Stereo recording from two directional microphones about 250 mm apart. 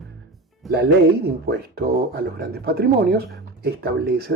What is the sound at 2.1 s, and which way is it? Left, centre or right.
Speech, right.